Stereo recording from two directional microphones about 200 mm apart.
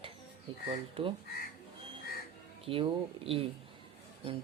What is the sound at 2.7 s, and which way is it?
Speech, 25° right (ahead or behind).